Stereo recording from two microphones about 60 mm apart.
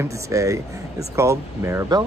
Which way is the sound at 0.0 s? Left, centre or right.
Right.